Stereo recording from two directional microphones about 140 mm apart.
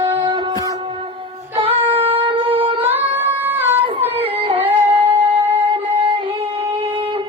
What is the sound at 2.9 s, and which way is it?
Singing, 15° right (ahead or behind).